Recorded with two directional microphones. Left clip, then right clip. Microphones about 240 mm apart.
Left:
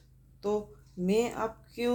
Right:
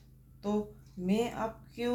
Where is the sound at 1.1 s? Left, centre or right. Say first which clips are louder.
Left 4 dB; left.